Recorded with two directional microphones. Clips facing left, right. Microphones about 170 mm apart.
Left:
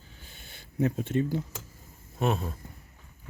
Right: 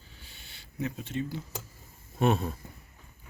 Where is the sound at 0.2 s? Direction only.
50° left (ahead or behind).